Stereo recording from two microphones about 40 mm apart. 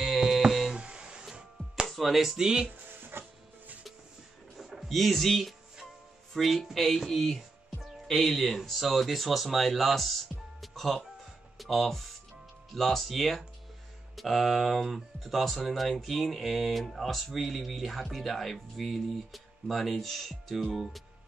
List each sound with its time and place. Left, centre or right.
0.0 s music: centre
0.7 s a sound: right
1.9 s speech: centre
2.9 s music: right
4.6 s music: centre
6.3 s speech: centre
10.6 s music: centre
11.5 s speech: centre